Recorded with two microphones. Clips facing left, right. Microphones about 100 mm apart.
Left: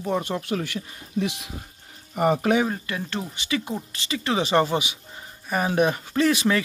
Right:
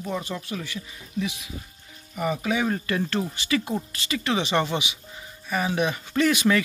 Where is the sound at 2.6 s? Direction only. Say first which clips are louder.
Right 3 dB; 10° left (ahead or behind); by 6.0 s 45° left (ahead or behind).